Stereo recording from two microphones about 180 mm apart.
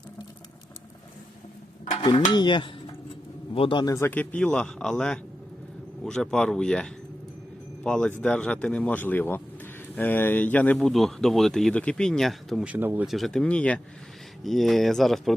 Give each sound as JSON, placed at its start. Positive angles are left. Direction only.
{"t": 1.8, "sound": "stir", "side_deg": 35}
{"t": 2.3, "sound": "dishes", "side_deg": 25}
{"t": 3.5, "sound": "a man's voice", "side_deg": 30}
{"t": 13.1, "sound": "speech", "side_deg": 0}